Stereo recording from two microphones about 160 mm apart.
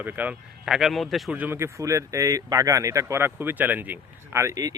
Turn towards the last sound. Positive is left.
turn(degrees=-20)  # may be behind; listen again after turning